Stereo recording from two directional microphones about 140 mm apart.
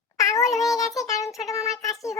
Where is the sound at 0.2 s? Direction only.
25° left (ahead or behind).